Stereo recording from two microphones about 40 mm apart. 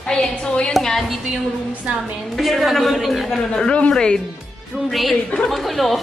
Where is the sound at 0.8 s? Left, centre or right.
Centre.